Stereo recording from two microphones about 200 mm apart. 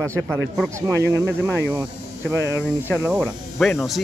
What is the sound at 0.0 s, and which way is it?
Speech, 15° right (ahead or behind).